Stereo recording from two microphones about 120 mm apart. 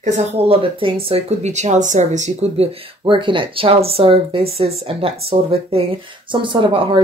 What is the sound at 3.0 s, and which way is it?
Speech, 45° right (ahead or behind).